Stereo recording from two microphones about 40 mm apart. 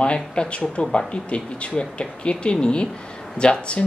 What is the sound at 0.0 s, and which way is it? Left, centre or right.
Speech, left.